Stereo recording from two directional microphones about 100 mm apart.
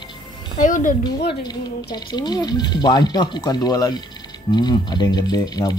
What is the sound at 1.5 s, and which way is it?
Speech, 45° left (ahead or behind).